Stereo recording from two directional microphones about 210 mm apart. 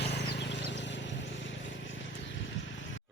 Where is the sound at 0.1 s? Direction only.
55° left (ahead or behind).